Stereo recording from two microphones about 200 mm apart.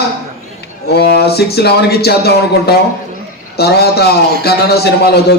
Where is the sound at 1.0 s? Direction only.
55° left (ahead or behind).